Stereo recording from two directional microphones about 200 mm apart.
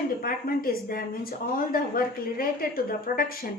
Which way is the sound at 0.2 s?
45° left (ahead or behind).